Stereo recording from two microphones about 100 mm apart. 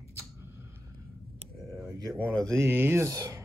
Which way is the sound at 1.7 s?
30° right (ahead or behind).